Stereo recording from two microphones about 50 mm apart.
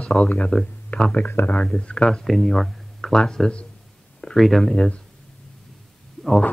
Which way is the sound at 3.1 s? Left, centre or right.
Centre.